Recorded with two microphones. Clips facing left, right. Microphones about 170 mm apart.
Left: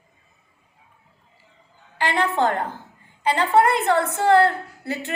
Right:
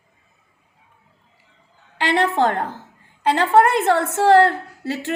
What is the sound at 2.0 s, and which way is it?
A woman's voice, 70° right (ahead or behind).